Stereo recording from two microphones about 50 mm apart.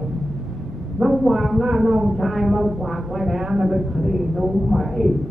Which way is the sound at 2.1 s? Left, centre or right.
Centre.